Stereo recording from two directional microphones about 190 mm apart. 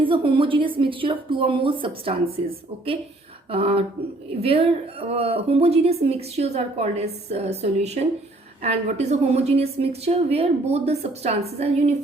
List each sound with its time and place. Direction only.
0.0 s speech: 25° right (ahead or behind)
3.5 s a woman's voice: 30° right (ahead or behind)